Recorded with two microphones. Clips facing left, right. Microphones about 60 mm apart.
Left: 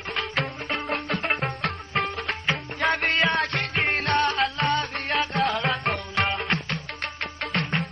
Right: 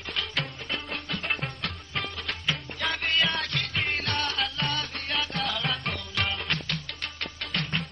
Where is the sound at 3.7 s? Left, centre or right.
Left.